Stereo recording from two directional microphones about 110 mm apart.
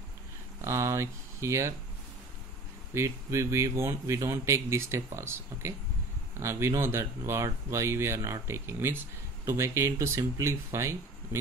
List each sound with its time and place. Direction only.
0.6 s speech: 25° right (ahead or behind)
2.9 s speech: 25° right (ahead or behind)